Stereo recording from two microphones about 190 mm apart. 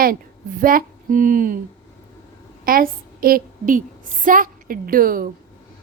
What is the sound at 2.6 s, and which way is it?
A woman's voice, 50° right (ahead or behind).